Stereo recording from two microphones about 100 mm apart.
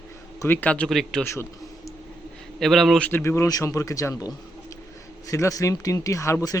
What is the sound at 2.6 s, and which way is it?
Speech, centre (ahead or behind).